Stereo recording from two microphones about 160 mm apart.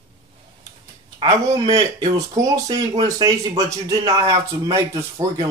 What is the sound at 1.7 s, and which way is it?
A man's voice, 20° right (ahead or behind).